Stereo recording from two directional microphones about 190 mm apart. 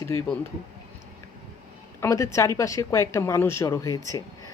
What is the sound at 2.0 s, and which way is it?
Speech, 15° left (ahead or behind).